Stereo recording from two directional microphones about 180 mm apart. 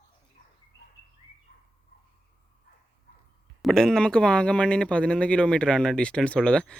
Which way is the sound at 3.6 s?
Centre (ahead or behind).